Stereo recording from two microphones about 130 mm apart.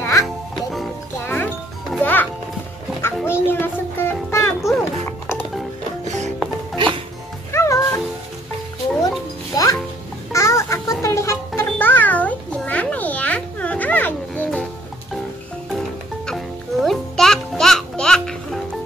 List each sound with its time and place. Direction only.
0.0 s music: 20° left (ahead or behind)
0.6 s music: centre (ahead or behind)
1.2 s music: 15° left (ahead or behind)
3.0 s a sound: 20° left (ahead or behind)
5.2 s music: 15° left (ahead or behind)
6.0 s music: 65° right (ahead or behind)
7.5 s music: 20° left (ahead or behind)
9.5 s music: 30° left (ahead or behind); by 14.7 s 10° left (ahead or behind)
16.3 s music: centre (ahead or behind)